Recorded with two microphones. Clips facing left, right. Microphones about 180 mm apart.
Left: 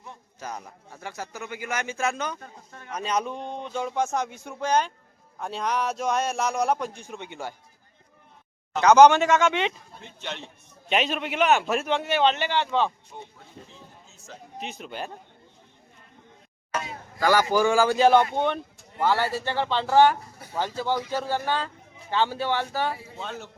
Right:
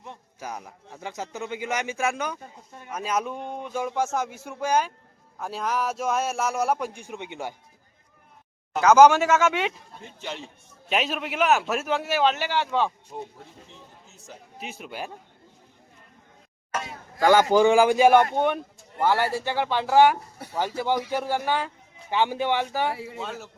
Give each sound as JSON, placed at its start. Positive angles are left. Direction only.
{"t": 0.0, "sound": "a man's voice", "side_deg": -15}
{"t": 8.7, "sound": "a man's voice", "side_deg": -5}
{"t": 13.1, "sound": "speech", "side_deg": -35}
{"t": 14.3, "sound": "a man's voice", "side_deg": -10}
{"t": 17.2, "sound": "a man's voice", "side_deg": -20}
{"t": 23.1, "sound": "speech", "side_deg": -5}